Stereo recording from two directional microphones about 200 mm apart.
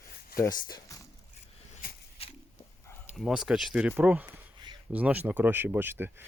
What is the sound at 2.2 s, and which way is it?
Pig, 30° left (ahead or behind).